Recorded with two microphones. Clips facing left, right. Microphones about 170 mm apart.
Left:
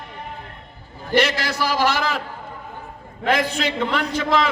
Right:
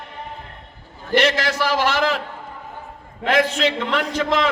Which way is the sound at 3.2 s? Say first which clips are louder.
Right 2 dB; 40° left (ahead or behind).